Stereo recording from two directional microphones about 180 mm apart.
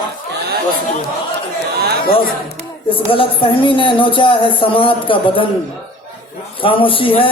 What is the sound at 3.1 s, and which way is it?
A man's voice, 30° left (ahead or behind).